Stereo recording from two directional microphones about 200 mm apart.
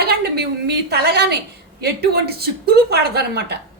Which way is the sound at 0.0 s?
55° right (ahead or behind).